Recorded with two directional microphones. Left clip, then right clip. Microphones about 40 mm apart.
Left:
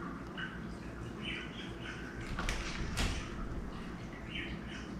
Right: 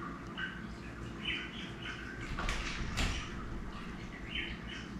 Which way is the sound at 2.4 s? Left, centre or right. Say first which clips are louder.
Right 1 dB; left.